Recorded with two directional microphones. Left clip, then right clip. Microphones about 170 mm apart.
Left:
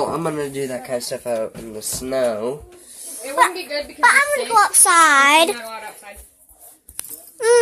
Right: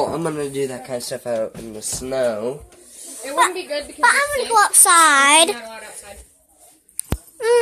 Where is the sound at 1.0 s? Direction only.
50° right (ahead or behind).